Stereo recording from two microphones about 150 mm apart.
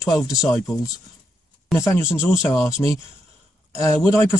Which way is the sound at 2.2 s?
15° left (ahead or behind).